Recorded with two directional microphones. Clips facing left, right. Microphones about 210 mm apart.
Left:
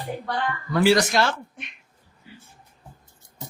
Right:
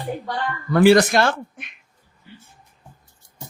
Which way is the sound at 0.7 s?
55° right (ahead or behind).